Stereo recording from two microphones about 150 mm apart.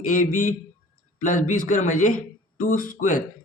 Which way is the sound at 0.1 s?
65° left (ahead or behind).